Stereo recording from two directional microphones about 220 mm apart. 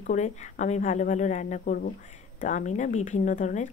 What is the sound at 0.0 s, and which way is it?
Speech, 35° left (ahead or behind).